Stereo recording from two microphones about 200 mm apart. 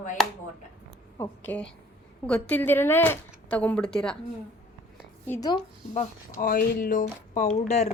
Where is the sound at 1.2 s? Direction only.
10° left (ahead or behind).